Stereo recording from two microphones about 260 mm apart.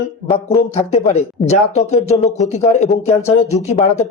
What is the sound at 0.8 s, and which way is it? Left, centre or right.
Speech, left.